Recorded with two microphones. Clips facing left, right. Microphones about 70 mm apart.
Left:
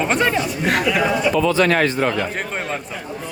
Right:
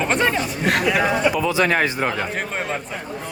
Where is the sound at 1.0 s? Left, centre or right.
Centre.